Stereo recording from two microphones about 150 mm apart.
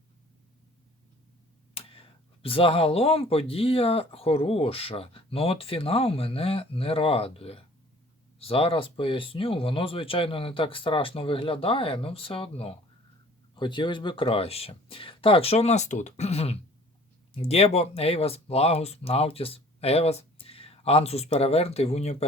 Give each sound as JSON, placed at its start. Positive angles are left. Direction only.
{"t": 1.7, "sound": "speech", "side_deg": 40}